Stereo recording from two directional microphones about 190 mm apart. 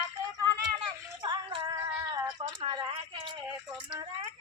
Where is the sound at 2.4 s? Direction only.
25° right (ahead or behind).